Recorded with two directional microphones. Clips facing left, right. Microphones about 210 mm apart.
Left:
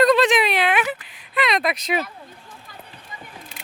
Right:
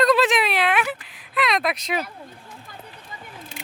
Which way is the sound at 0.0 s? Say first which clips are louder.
Left 2 dB; centre (ahead or behind).